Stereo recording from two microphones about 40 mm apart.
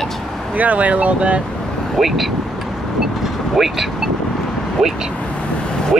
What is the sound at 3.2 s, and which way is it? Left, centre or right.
Vehicle, centre.